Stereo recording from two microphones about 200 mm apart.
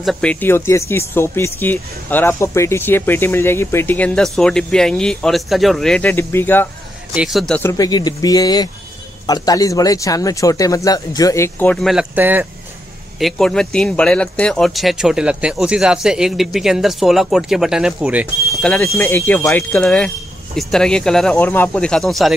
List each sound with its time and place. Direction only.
0.0 s speech: 5° left (ahead or behind)
7.2 s speech: centre (ahead or behind)
7.7 s speech: 20° left (ahead or behind); by 12.4 s 10° right (ahead or behind)
13.2 s speech: 5° left (ahead or behind)